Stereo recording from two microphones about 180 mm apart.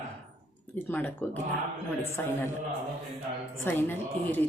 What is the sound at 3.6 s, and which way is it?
Speech, 10° left (ahead or behind).